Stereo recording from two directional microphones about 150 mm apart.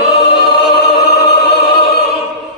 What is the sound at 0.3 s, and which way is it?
Music, 90° left.